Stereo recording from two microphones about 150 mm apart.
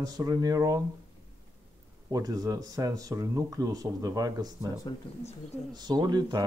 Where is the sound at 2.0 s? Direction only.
25° right (ahead or behind).